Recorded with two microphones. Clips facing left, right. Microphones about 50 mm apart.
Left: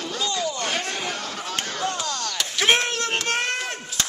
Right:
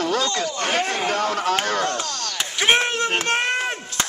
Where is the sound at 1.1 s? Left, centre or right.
Right.